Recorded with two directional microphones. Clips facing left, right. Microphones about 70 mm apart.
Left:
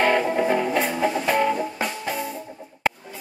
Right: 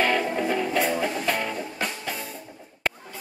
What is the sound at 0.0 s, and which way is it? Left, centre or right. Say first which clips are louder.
Music: left 4 dB; left.